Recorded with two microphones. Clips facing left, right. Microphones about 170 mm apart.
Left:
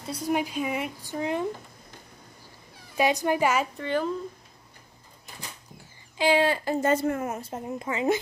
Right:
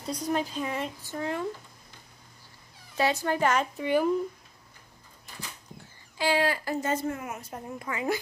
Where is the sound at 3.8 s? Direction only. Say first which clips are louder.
Right 2 dB; 10° right (ahead or behind).